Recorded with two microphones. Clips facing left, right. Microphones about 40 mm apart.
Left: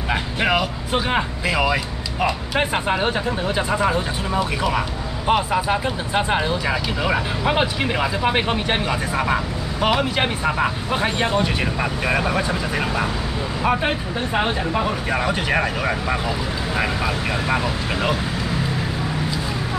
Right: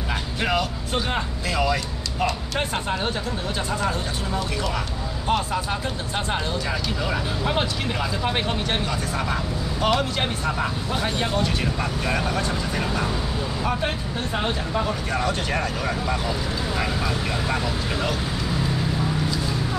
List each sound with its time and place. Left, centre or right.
0.1 s speech: left